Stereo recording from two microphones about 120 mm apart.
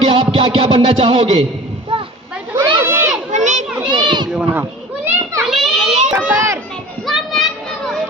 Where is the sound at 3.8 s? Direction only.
40° right (ahead or behind).